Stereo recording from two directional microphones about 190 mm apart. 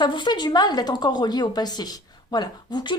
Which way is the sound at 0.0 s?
25° left (ahead or behind).